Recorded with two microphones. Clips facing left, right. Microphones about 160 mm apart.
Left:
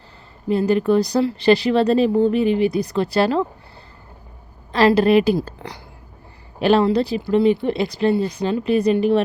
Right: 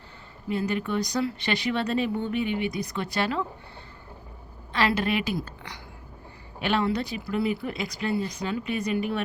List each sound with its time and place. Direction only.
0.4 s speech: 35° left (ahead or behind)
4.7 s speech: 35° left (ahead or behind)